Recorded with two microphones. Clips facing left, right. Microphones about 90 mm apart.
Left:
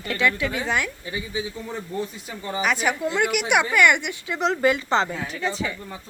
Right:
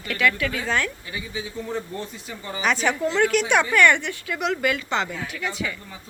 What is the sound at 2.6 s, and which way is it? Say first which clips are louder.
Speech: right 1 dB; 5° left (ahead or behind).